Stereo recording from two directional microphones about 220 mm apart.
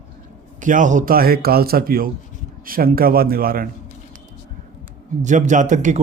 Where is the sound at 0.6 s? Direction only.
35° right (ahead or behind).